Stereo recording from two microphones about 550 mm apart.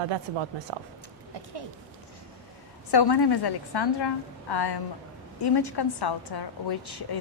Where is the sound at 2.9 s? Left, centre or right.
Left.